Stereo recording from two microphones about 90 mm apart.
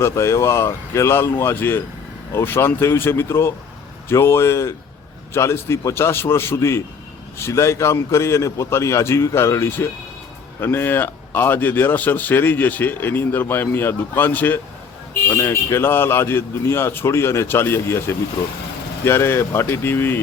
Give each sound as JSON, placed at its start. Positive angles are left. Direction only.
{"t": 0.0, "sound": "a man's voice", "side_deg": 35}
{"t": 19.0, "sound": "speech", "side_deg": 25}